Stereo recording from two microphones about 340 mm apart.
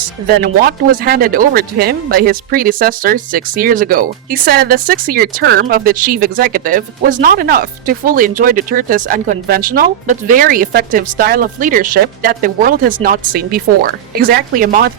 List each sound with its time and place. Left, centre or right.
0.4 s speech: right